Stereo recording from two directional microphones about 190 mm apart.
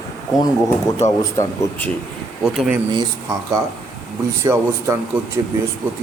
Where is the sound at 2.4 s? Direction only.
5° right (ahead or behind).